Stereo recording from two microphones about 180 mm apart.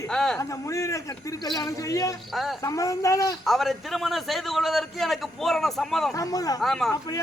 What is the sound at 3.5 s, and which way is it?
A man's voice, centre (ahead or behind).